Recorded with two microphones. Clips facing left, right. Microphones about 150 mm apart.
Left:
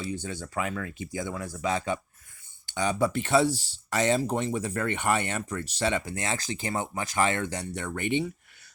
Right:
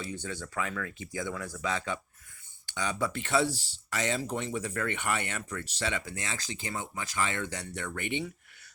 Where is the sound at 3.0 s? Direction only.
20° left (ahead or behind).